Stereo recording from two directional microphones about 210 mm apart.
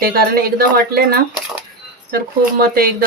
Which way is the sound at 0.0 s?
45° right (ahead or behind).